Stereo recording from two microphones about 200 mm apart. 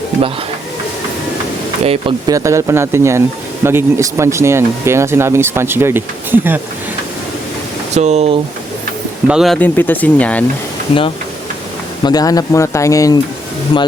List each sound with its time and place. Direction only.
1.8 s speech: 25° right (ahead or behind); by 6.6 s 10° right (ahead or behind)
7.9 s speech: 35° right (ahead or behind)
9.2 s speech: centre (ahead or behind)
12.0 s speech: 20° left (ahead or behind)